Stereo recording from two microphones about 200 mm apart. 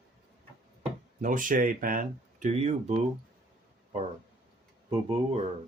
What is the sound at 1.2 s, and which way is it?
Speech, 40° right (ahead or behind).